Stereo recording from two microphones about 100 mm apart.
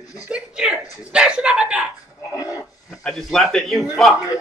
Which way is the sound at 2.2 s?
35° left (ahead or behind).